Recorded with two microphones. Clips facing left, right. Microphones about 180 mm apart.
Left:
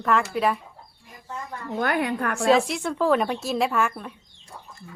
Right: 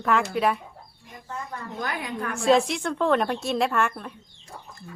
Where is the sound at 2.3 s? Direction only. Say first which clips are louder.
Right 1 dB; centre (ahead or behind).